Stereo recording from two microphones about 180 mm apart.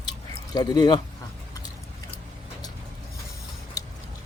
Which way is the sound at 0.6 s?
20° left (ahead or behind).